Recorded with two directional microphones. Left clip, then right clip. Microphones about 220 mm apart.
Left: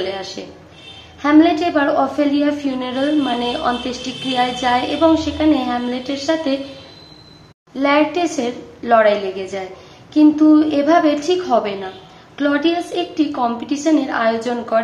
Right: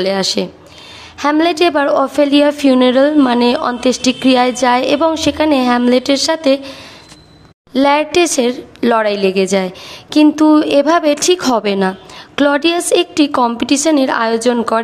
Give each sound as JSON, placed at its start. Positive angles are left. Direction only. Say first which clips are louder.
{"t": 0.0, "sound": "a woman's voice", "louder": "right 9 dB", "side_deg": -55}
{"t": 7.7, "sound": "a woman's voice", "louder": "right 4 dB", "side_deg": -50}